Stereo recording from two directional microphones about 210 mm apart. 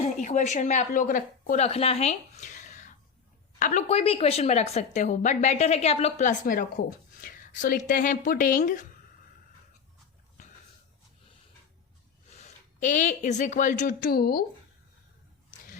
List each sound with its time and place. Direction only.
0.0 s a woman's voice: 35° left (ahead or behind)
12.4 s speech: 35° left (ahead or behind)